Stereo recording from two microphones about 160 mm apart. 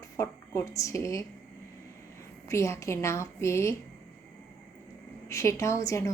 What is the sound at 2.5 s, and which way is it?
A woman's voice, 15° left (ahead or behind).